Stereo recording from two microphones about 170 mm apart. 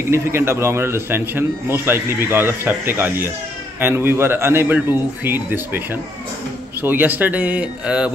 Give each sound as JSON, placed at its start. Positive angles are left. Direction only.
{"t": 0.1, "sound": "speech", "side_deg": -15}
{"t": 6.8, "sound": "speech", "side_deg": -10}